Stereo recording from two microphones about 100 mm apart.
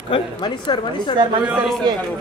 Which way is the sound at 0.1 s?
50° left (ahead or behind).